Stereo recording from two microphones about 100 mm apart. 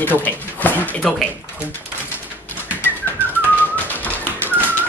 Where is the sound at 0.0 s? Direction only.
20° left (ahead or behind).